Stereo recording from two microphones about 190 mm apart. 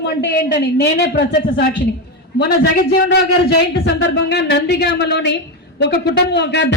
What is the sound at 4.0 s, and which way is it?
A woman's voice, 65° left (ahead or behind).